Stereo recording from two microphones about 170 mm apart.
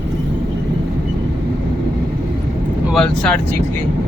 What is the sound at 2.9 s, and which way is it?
Speech, 5° left (ahead or behind).